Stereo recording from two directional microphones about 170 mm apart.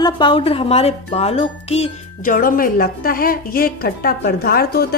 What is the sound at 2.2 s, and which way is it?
A woman's voice, 55° left (ahead or behind).